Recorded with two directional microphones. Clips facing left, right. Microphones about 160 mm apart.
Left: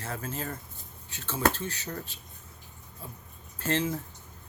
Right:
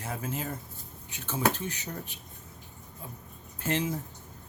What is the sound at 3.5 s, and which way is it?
Speech, 15° right (ahead or behind).